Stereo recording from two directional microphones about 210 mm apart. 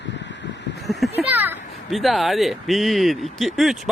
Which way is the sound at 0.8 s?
Centre (ahead or behind).